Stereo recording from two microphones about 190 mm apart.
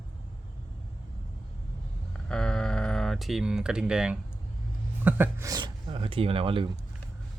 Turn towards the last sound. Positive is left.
turn(degrees=-30)  # may be behind; listen again after turning